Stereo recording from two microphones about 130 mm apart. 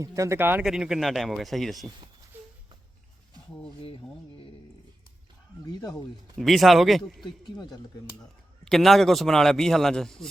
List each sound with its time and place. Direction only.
0.0 s speech: 25° right (ahead or behind)
0.6 s a man's voice: 5° right (ahead or behind)
3.8 s speech: 45° left (ahead or behind)
5.6 s speech: 30° left (ahead or behind)
6.4 s a man's voice: centre (ahead or behind)
7.3 s speech: 30° left (ahead or behind)
8.6 s a man's voice: centre (ahead or behind)